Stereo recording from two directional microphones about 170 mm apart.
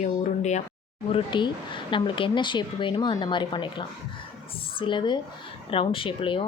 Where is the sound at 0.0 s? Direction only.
45° left (ahead or behind).